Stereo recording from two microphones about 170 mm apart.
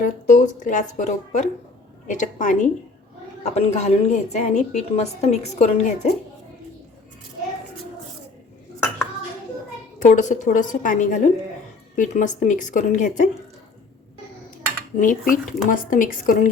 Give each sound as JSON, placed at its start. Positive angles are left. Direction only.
{"t": 0.0, "sound": "a woman's voice", "side_deg": 50}
{"t": 10.0, "sound": "speech", "side_deg": 45}
{"t": 14.9, "sound": "speech", "side_deg": 50}